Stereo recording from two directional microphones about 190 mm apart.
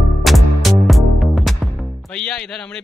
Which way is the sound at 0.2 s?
Centre (ahead or behind).